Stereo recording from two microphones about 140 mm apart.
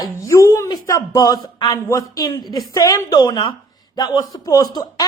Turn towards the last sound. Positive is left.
turn(degrees=30)  # may be behind; listen again after turning